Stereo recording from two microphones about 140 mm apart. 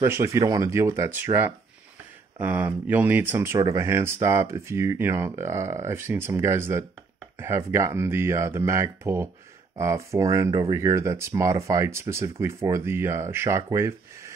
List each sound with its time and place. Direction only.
0.0 s speech: 20° right (ahead or behind)